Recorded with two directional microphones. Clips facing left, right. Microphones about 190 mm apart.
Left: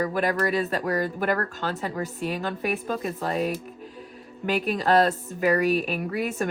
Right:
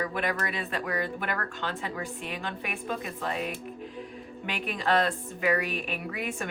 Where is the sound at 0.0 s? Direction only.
40° left (ahead or behind).